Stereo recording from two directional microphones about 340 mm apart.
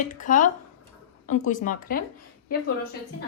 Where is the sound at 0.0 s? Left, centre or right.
Left.